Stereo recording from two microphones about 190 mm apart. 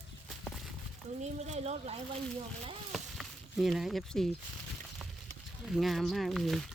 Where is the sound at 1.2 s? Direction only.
35° right (ahead or behind).